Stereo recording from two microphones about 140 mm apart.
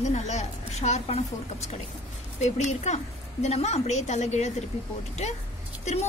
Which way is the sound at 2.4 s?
55° left (ahead or behind).